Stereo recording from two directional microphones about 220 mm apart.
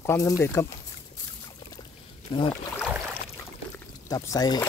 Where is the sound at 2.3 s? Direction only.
20° left (ahead or behind).